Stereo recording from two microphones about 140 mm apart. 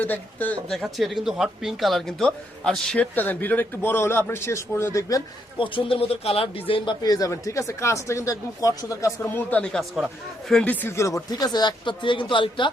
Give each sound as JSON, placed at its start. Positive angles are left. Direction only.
{"t": 0.0, "sound": "speech", "side_deg": 10}
{"t": 5.5, "sound": "speech", "side_deg": 40}
{"t": 7.0, "sound": "speech", "side_deg": 25}
{"t": 9.2, "sound": "speech", "side_deg": 10}